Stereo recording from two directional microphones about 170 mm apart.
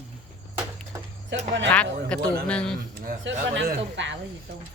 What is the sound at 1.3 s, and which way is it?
Speech, 90° right.